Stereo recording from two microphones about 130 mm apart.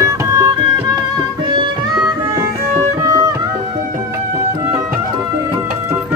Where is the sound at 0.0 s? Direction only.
25° right (ahead or behind).